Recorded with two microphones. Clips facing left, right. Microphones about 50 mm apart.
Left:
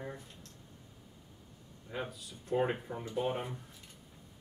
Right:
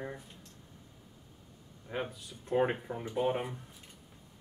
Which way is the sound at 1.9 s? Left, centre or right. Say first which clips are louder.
Right 3 dB; right.